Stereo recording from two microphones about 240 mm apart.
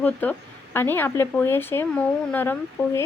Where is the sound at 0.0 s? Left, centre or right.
Centre.